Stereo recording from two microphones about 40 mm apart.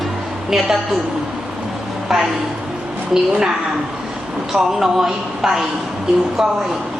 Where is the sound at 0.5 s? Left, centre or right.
Centre.